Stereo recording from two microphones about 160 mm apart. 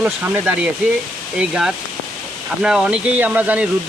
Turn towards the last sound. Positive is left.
turn(degrees=-10)  # may be behind; listen again after turning